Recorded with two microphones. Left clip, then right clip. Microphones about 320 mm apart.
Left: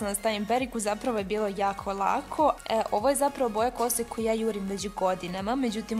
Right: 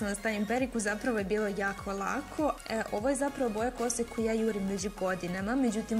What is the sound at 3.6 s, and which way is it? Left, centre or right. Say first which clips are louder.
Speech: left 4 dB; centre.